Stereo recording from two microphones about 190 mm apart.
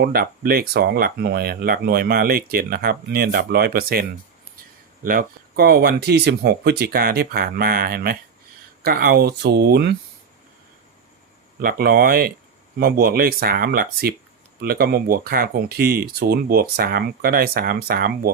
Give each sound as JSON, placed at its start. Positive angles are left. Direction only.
{"t": 0.0, "sound": "speech", "side_deg": -55}
{"t": 5.0, "sound": "speech", "side_deg": -50}
{"t": 11.6, "sound": "speech", "side_deg": -50}